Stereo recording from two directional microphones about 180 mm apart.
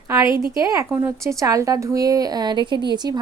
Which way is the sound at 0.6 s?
20° right (ahead or behind).